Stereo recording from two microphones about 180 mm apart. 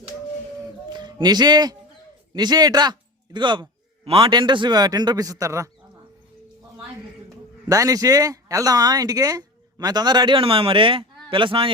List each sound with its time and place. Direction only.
0.9 s speech: 25° right (ahead or behind)
7.7 s speech: 20° right (ahead or behind)